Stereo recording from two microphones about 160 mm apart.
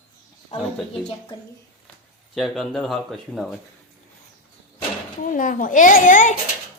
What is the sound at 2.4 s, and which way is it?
Speech, centre (ahead or behind).